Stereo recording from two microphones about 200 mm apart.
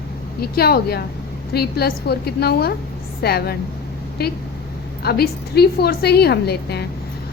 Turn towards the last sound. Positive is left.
turn(degrees=55)  # may be behind; listen again after turning